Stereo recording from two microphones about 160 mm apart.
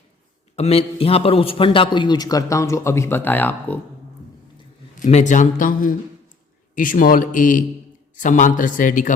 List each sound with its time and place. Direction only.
0.5 s a man's voice: 40° left (ahead or behind); by 3.8 s 10° left (ahead or behind)
4.9 s a man's voice: 50° left (ahead or behind)